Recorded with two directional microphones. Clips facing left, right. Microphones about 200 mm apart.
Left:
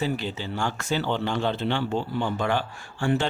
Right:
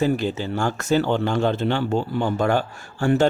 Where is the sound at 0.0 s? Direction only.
45° right (ahead or behind).